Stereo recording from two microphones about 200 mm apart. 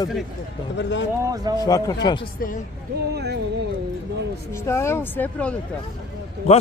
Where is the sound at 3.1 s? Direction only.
55° right (ahead or behind).